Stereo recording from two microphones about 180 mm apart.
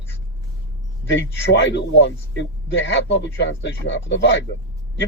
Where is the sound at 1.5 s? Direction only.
70° left (ahead or behind).